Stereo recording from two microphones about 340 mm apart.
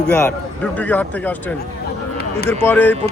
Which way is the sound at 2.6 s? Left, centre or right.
Centre.